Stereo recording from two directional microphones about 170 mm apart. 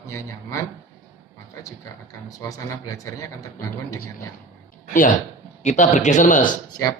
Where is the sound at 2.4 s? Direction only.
20° left (ahead or behind).